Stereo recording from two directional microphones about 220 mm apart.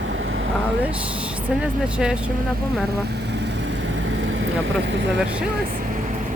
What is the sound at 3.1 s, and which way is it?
Vehicle, 50° right (ahead or behind).